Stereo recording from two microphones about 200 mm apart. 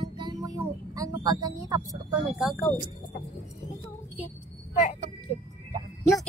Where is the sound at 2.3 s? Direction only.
Centre (ahead or behind).